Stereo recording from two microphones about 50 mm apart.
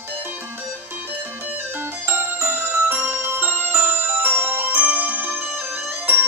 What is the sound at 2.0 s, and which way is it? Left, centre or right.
Music, right.